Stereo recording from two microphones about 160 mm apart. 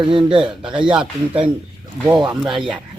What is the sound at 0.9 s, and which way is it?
Speech, 5° right (ahead or behind).